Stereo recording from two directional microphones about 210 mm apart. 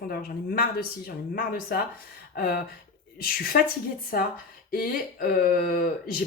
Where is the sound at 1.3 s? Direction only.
45° left (ahead or behind).